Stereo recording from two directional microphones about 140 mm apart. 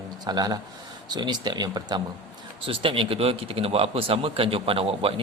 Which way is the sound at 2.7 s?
40° right (ahead or behind).